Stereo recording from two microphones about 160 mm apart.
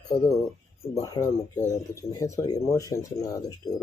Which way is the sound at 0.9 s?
20° left (ahead or behind).